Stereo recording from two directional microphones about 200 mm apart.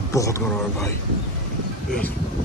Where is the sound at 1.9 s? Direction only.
5° left (ahead or behind).